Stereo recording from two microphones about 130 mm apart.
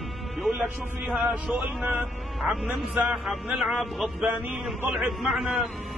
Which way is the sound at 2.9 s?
5° right (ahead or behind).